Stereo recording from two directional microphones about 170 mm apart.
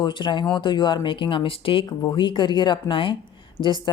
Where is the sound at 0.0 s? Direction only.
25° left (ahead or behind).